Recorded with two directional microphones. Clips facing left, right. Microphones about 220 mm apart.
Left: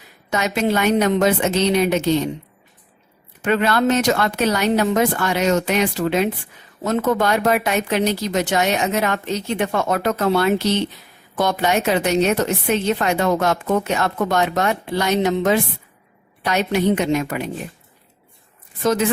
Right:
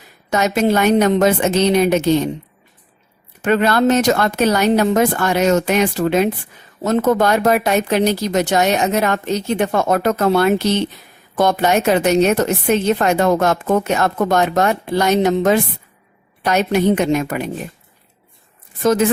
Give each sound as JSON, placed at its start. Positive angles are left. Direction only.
{"t": 0.3, "sound": "a woman's voice", "side_deg": -45}
{"t": 3.4, "sound": "a woman's voice", "side_deg": -40}
{"t": 18.8, "sound": "a woman's voice", "side_deg": -45}